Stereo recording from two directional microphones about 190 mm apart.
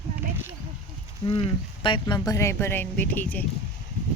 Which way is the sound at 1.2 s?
25° left (ahead or behind).